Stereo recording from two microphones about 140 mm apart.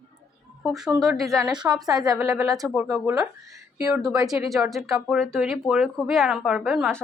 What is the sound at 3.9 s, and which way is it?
A woman's voice, 5° right (ahead or behind).